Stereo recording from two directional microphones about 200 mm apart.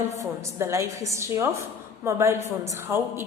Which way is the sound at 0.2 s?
15° right (ahead or behind).